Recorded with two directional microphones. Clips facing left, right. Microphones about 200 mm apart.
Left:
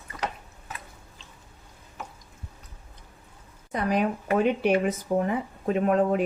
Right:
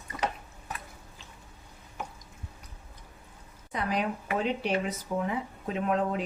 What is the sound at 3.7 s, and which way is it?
Speech, 45° left (ahead or behind).